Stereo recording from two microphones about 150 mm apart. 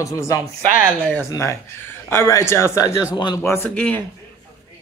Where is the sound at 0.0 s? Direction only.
20° left (ahead or behind).